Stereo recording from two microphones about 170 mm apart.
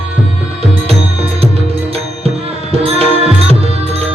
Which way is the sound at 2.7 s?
35° right (ahead or behind).